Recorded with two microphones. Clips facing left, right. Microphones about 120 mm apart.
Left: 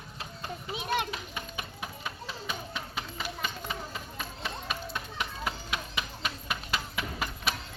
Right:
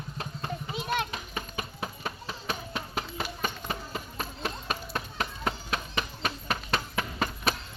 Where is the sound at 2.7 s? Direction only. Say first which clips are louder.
Right 3 dB; 50° right (ahead or behind).